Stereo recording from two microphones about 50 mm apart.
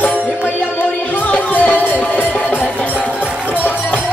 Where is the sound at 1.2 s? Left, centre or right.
Left.